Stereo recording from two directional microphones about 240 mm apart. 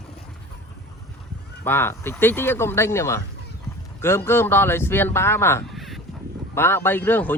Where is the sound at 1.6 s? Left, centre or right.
Centre.